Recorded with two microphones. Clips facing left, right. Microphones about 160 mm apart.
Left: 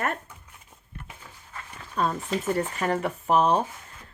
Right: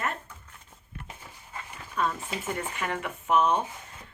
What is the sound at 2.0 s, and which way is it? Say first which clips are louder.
Speech: left 4 dB; 35° left (ahead or behind).